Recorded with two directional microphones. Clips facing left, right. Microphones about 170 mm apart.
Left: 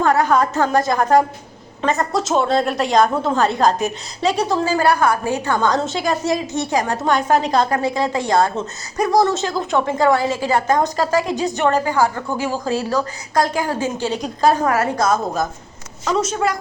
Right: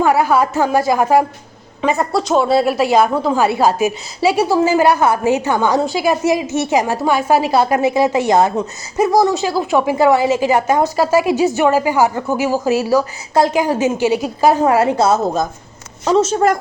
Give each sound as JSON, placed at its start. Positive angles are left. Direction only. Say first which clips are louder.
{"t": 0.0, "sound": "a woman's voice", "louder": "right 2 dB", "side_deg": -10}
{"t": 6.8, "sound": "a woman's voice", "louder": "right 2 dB", "side_deg": -5}
{"t": 14.9, "sound": "a woman's voice", "louder": "right 4 dB", "side_deg": -25}